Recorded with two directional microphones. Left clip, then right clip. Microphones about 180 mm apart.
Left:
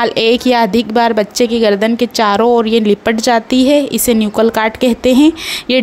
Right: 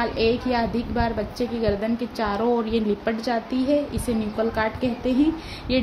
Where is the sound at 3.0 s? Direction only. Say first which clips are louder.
Left 13 dB; 55° left (ahead or behind).